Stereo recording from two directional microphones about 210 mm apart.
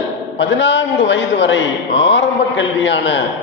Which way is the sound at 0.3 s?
60° left (ahead or behind).